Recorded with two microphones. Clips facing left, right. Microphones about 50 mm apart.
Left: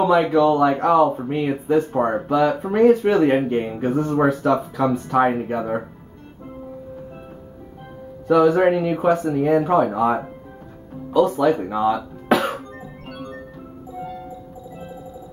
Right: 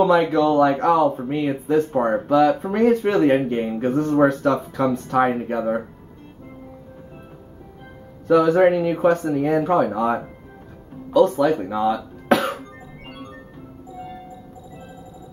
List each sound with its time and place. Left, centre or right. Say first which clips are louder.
0.0 s speech: left 1 dB; centre
8.3 s speech: even; centre
11.1 s music: right 1 dB; centre
13.1 s music: left 5 dB; left